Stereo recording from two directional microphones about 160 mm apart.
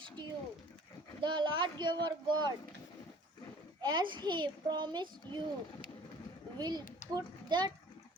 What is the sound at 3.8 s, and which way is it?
A child's voice, 25° right (ahead or behind).